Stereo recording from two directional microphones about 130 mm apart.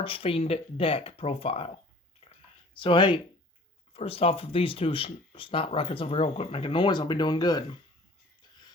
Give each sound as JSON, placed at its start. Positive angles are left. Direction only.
{"t": 0.0, "sound": "speech", "side_deg": 45}
{"t": 2.2, "sound": "a sound", "side_deg": 45}
{"t": 2.8, "sound": "speech", "side_deg": 40}